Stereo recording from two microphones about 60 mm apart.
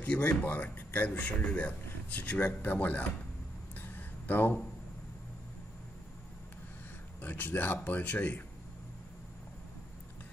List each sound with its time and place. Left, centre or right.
0.0 s a man's voice: left
3.7 s a sound: left
7.2 s a man's voice: left